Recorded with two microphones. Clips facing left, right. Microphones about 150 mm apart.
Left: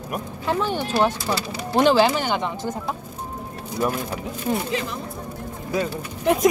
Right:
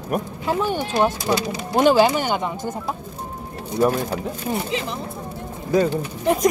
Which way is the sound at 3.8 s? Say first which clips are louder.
Right 5 dB; 35° right (ahead or behind).